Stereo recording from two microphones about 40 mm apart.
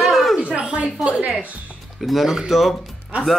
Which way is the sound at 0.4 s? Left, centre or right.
Right.